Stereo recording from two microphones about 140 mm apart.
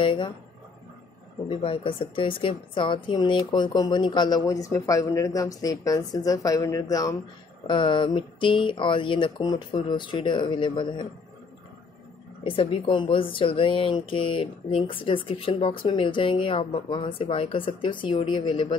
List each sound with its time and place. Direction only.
0.0 s speech: 35° left (ahead or behind)
1.5 s a woman's voice: 40° left (ahead or behind)
12.4 s speech: 40° left (ahead or behind)